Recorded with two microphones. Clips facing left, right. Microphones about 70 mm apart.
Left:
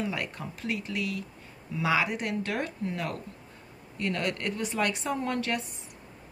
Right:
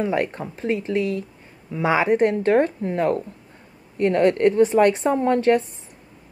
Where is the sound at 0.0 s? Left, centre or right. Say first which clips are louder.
Right 10 dB; right.